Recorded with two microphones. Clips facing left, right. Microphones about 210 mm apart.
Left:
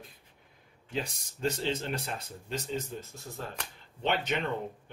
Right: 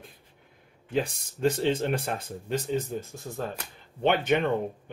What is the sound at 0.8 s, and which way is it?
Speech, 55° right (ahead or behind).